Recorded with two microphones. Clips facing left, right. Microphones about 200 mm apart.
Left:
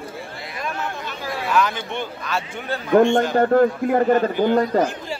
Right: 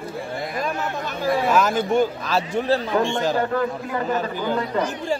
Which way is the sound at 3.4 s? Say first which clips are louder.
Left 7 dB; 55° left (ahead or behind).